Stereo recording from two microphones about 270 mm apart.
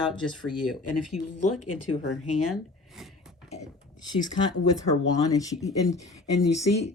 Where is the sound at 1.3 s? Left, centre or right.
Left.